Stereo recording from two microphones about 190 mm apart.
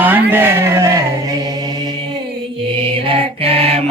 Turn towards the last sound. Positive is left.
turn(degrees=-30)  # may be behind; listen again after turning